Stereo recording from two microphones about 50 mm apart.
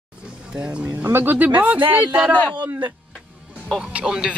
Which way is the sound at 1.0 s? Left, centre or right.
Right.